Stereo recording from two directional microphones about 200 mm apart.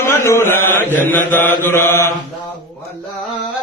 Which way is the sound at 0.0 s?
15° left (ahead or behind).